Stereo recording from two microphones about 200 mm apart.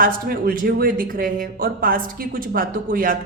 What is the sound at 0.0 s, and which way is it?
A man's voice, 45° right (ahead or behind).